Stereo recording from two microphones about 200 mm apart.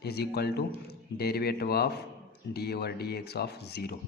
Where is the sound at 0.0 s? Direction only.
55° left (ahead or behind).